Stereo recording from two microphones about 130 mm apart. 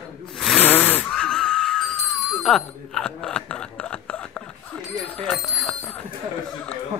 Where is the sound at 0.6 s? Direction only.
15° left (ahead or behind).